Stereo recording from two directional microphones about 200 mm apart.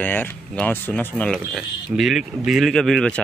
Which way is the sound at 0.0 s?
10° left (ahead or behind).